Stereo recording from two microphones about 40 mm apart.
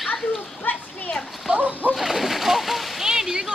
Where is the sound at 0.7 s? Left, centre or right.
Left.